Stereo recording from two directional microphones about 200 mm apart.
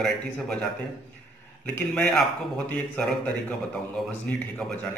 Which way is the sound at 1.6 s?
5° left (ahead or behind).